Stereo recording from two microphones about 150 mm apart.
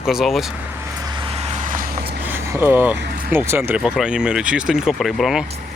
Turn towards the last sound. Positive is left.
turn(degrees=0)  # may be behind; listen again after turning